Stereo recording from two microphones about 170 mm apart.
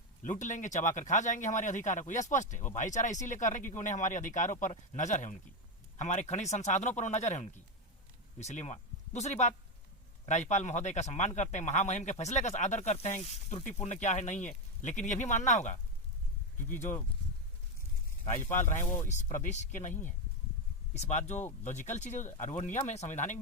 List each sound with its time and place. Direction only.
0.2 s speech: 45° left (ahead or behind)
18.6 s speech: 45° left (ahead or behind)
20.9 s speech: 45° left (ahead or behind)